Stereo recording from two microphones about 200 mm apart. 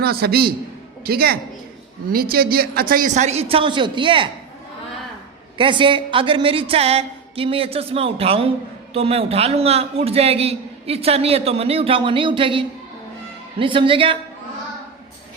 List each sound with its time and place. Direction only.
0.0 s a man's voice: 50° right (ahead or behind); by 4.3 s 25° right (ahead or behind)
5.5 s a man's voice: 25° right (ahead or behind)